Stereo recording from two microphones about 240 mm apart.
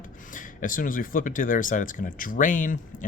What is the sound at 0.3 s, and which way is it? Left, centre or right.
Speech, left.